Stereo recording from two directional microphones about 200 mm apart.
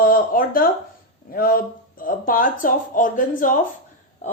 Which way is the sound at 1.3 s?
45° left (ahead or behind).